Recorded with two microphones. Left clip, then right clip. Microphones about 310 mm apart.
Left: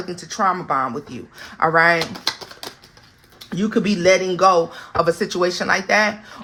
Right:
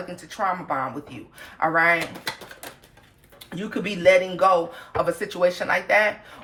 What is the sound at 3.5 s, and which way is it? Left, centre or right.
Speech, left.